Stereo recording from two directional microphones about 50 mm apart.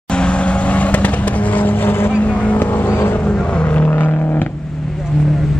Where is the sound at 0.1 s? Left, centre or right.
Left.